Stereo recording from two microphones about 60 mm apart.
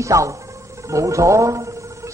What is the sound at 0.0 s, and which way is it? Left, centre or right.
Speech, right.